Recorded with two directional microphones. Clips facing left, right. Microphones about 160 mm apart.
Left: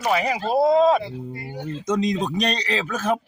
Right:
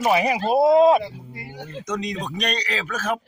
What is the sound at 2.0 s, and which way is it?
A man's voice, 35° left (ahead or behind).